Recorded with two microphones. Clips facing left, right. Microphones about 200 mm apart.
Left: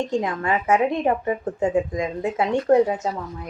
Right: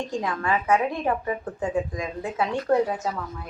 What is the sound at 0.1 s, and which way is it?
Speech, 25° left (ahead or behind).